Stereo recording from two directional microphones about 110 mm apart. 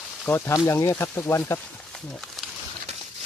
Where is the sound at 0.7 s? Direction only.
25° left (ahead or behind).